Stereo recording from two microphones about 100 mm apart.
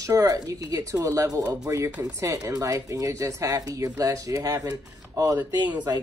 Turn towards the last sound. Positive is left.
turn(degrees=-30)  # may be behind; listen again after turning